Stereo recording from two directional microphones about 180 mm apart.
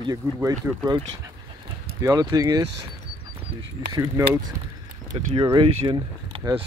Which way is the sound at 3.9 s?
20° right (ahead or behind).